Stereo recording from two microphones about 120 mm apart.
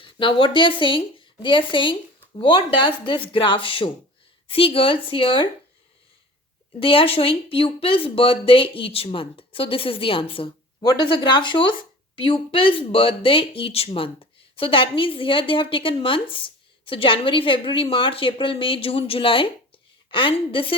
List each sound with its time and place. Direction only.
0.0 s speech: 45° left (ahead or behind)
6.7 s speech: 50° left (ahead or behind)